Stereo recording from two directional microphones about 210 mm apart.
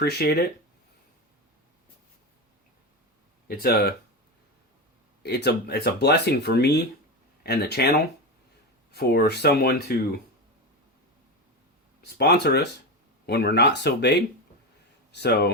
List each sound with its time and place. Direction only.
0.0 s speech: 50° left (ahead or behind)
3.4 s speech: 50° left (ahead or behind)
5.2 s speech: 50° left (ahead or behind)
12.0 s speech: 50° left (ahead or behind)